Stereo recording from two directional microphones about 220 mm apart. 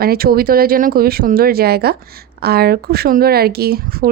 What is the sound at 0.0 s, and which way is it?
Speech, 45° right (ahead or behind).